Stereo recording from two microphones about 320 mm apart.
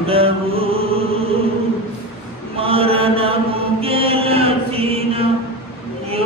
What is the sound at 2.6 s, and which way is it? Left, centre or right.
Mantra, centre.